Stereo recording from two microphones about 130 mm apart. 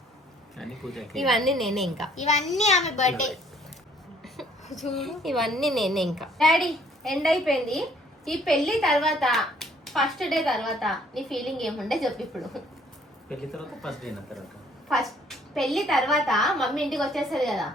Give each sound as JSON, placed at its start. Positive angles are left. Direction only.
{"t": 0.5, "sound": "a woman's voice", "side_deg": 0}
{"t": 2.6, "sound": "a child's voice", "side_deg": 65}
{"t": 3.1, "sound": "a woman's voice", "side_deg": 0}
{"t": 4.4, "sound": "a sound", "side_deg": 0}
{"t": 4.8, "sound": "a woman's voice", "side_deg": 0}